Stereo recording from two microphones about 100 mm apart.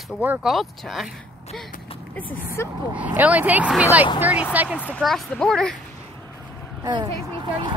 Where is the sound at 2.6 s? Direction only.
25° left (ahead or behind).